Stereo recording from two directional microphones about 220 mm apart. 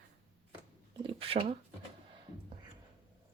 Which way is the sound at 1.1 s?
25° right (ahead or behind).